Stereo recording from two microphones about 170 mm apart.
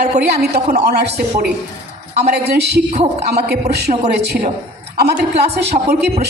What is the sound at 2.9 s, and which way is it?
Speech, 40° right (ahead or behind).